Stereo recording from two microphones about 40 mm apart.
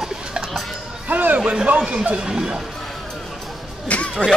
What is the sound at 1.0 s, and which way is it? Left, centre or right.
Speech, right.